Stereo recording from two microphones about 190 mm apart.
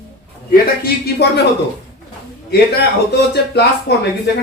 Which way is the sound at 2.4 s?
55° left (ahead or behind).